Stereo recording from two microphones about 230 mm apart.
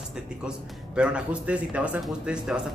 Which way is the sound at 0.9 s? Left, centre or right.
Centre.